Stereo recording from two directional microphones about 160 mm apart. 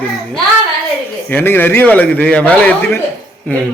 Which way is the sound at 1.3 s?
10° left (ahead or behind).